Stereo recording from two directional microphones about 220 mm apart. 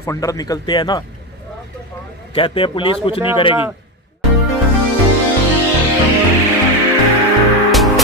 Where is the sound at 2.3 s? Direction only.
25° left (ahead or behind).